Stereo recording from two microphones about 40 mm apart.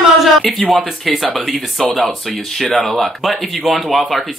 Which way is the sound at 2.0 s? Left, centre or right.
Centre.